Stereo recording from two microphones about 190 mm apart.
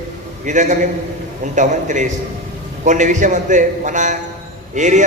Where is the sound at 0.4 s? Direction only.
40° right (ahead or behind).